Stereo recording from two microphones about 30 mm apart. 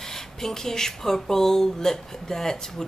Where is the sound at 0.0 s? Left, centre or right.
Centre.